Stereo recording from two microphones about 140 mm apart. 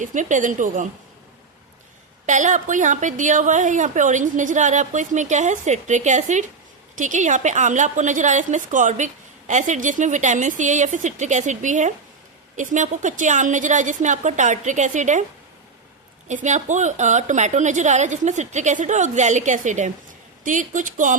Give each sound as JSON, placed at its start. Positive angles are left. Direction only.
{"t": 0.0, "sound": "a woman's voice", "side_deg": -65}
{"t": 2.2, "sound": "a woman's voice", "side_deg": -60}
{"t": 16.3, "sound": "a woman's voice", "side_deg": -60}